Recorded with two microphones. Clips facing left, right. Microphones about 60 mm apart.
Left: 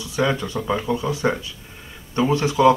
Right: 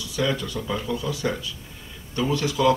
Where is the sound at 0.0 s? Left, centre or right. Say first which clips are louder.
Left 4 dB; left.